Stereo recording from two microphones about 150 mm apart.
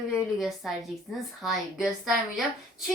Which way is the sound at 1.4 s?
5° right (ahead or behind).